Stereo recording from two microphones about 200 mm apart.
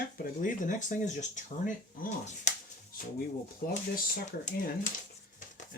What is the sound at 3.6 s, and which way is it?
Speech, 50° left (ahead or behind).